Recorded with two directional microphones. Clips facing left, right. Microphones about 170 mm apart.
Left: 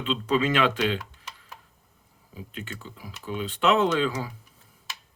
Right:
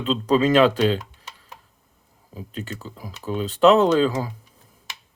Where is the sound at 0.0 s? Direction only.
40° right (ahead or behind).